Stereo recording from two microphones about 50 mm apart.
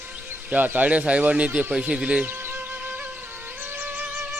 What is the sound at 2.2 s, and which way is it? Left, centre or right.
Music, right.